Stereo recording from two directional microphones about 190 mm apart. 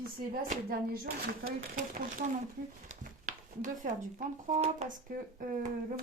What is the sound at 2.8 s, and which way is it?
Speech, 45° right (ahead or behind).